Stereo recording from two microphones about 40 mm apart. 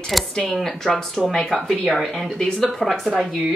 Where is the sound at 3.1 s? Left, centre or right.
Centre.